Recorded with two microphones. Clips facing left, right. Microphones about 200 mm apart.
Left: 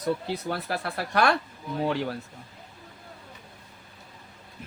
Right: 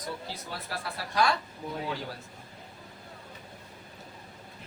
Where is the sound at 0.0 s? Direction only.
60° left (ahead or behind).